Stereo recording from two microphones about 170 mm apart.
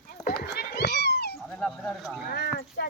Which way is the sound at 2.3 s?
65° left (ahead or behind).